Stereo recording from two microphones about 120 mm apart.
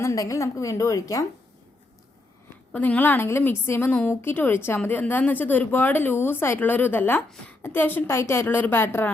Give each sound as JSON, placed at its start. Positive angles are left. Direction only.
{"t": 0.0, "sound": "a woman's voice", "side_deg": 25}
{"t": 2.7, "sound": "a woman's voice", "side_deg": 15}